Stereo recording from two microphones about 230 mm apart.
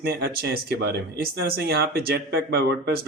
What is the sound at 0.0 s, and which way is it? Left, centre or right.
Speech, right.